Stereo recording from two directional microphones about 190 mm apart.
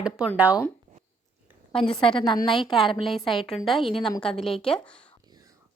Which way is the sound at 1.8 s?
25° left (ahead or behind).